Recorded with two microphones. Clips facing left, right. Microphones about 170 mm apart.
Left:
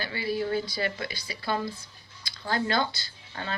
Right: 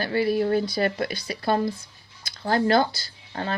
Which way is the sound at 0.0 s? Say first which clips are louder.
Right 7 dB; 55° right (ahead or behind).